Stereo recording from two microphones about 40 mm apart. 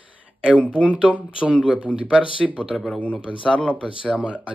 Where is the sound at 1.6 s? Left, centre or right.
Right.